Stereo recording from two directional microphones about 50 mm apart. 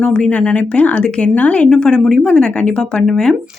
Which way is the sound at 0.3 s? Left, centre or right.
Left.